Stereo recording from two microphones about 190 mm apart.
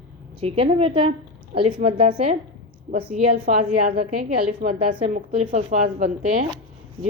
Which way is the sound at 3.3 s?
55° right (ahead or behind).